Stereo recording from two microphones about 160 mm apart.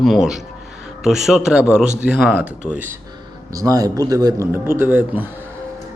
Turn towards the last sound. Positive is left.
turn(degrees=-10)  # may be behind; listen again after turning